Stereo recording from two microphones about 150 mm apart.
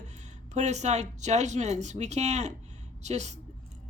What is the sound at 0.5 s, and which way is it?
A woman's voice, 50° right (ahead or behind).